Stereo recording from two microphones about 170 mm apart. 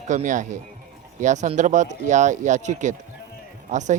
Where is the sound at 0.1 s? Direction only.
45° right (ahead or behind).